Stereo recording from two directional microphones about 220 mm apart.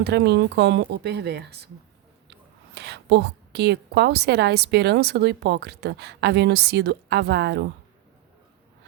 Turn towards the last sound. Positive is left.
turn(degrees=-50)  # may be behind; listen again after turning